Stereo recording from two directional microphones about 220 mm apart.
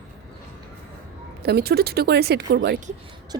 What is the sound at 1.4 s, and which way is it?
Speech, 45° right (ahead or behind).